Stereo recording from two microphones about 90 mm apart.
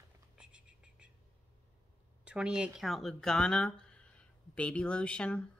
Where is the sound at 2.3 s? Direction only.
10° right (ahead or behind).